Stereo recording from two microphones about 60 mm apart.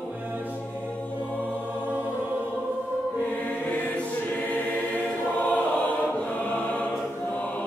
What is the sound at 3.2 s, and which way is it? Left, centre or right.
Choir, left.